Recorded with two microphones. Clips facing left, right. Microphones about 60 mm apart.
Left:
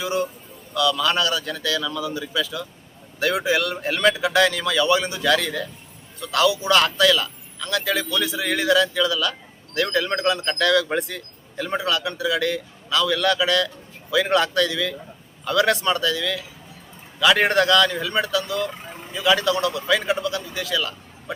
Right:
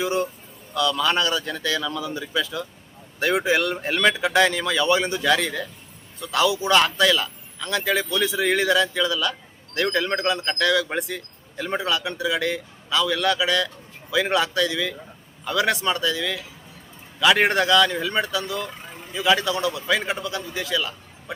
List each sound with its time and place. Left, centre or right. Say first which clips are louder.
0.0 s speech: right 1 dB; right
5.2 s a man's voice: left 1 dB; centre